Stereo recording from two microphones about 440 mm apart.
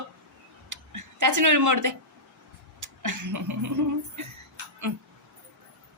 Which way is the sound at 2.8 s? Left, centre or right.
Right.